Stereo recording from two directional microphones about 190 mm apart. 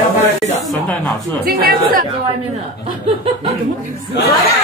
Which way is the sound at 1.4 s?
55° right (ahead or behind).